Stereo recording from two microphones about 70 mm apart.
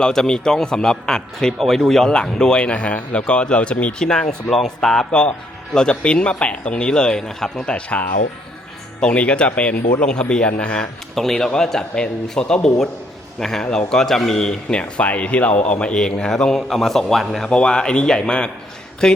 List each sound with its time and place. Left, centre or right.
0.0 s a man's voice: centre
11.1 s a man's voice: centre